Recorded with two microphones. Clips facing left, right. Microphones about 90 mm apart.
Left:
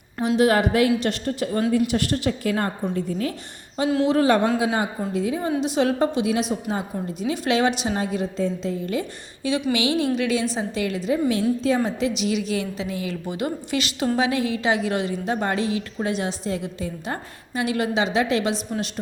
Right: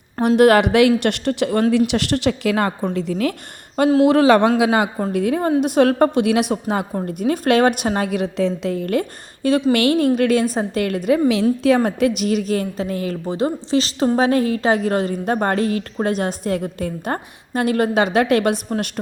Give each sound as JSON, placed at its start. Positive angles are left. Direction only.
{"t": 0.2, "sound": "a woman's voice", "side_deg": -60}
{"t": 5.1, "sound": "a woman's voice", "side_deg": -60}
{"t": 11.3, "sound": "a woman's voice", "side_deg": -80}